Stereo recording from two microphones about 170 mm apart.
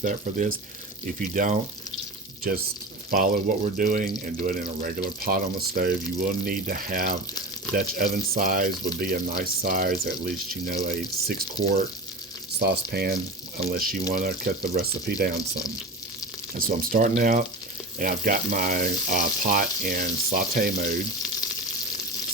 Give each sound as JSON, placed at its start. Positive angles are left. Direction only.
{"t": 0.0, "sound": "speech", "side_deg": -50}
{"t": 3.1, "sound": "speech", "side_deg": -55}
{"t": 13.7, "sound": "speech", "side_deg": -60}
{"t": 16.6, "sound": "speech", "side_deg": -55}